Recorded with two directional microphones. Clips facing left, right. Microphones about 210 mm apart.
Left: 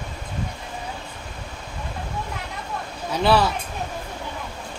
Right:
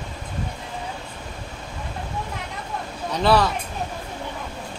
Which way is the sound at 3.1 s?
5° left (ahead or behind).